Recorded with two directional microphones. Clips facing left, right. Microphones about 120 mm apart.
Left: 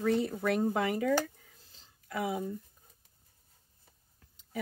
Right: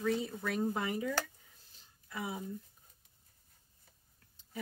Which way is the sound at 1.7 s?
80° left.